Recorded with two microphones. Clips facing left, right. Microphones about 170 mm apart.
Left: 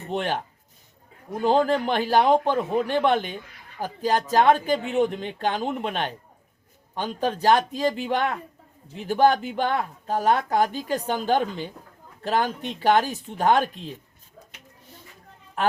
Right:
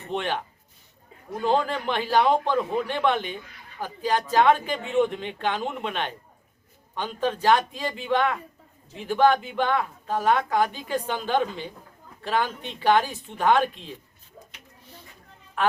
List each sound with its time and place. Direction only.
0.1 s speech: 40° left (ahead or behind)
1.6 s speech: 40° left (ahead or behind)